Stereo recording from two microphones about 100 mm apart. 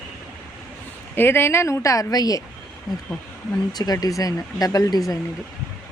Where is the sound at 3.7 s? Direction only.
40° left (ahead or behind).